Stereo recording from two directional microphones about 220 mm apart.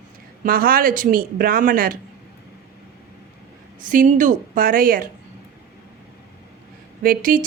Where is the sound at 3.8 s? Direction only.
40° right (ahead or behind).